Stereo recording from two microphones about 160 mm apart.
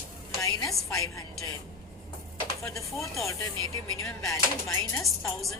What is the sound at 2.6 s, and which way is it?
Speech, 20° left (ahead or behind).